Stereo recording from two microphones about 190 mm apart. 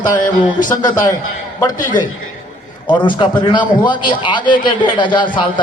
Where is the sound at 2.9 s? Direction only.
25° left (ahead or behind).